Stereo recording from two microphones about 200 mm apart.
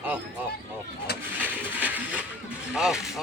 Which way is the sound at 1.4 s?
10° right (ahead or behind).